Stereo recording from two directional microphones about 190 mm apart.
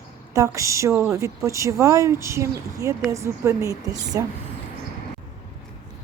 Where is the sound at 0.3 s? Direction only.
15° right (ahead or behind).